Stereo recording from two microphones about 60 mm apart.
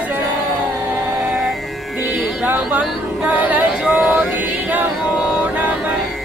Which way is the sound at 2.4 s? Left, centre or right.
Right.